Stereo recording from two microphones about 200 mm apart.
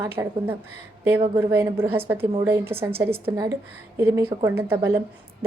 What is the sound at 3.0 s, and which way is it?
Speech, 30° right (ahead or behind).